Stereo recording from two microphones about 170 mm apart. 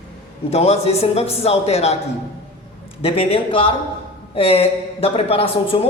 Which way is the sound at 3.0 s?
35° left (ahead or behind).